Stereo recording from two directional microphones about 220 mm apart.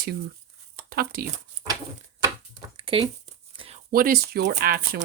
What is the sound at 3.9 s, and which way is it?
Speech, 40° right (ahead or behind).